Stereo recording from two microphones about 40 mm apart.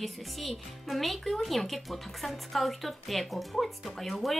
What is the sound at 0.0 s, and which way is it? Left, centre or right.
Speech, centre.